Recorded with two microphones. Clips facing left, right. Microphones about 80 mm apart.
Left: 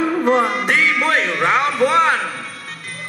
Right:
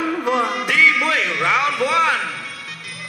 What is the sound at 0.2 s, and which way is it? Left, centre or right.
Music, left.